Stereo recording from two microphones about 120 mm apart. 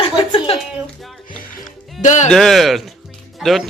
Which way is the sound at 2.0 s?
85° left.